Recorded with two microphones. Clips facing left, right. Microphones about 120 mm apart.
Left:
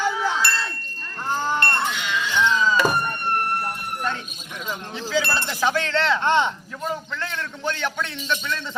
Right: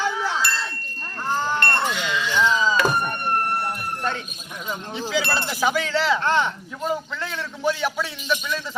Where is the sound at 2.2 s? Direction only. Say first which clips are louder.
Even; 10° right (ahead or behind).